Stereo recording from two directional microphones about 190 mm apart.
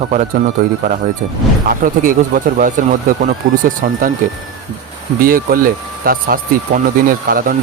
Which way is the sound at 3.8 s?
45° right (ahead or behind).